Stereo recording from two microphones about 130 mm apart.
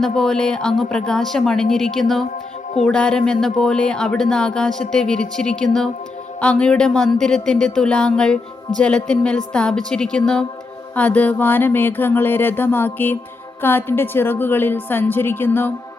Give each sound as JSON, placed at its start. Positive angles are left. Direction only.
{"t": 0.0, "sound": "speech", "side_deg": 5}